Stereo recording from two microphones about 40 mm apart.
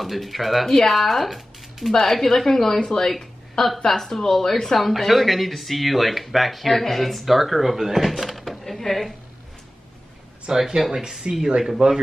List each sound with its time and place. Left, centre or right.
0.0 s a woman's voice: centre
3.2 s a sound: centre
3.8 s speech: centre
10.5 s speech: centre